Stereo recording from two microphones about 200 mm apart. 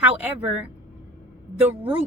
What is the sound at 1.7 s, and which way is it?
Speech, 10° right (ahead or behind).